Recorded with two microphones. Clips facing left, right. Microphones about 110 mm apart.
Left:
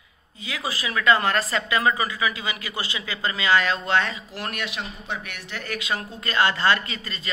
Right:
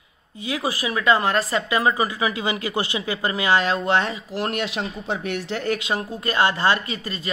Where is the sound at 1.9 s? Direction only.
25° right (ahead or behind).